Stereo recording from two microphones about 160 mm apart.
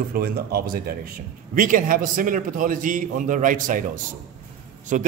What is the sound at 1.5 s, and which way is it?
A man's voice, 55° right (ahead or behind).